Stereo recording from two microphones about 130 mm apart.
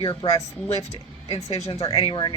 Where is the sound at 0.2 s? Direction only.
45° left (ahead or behind).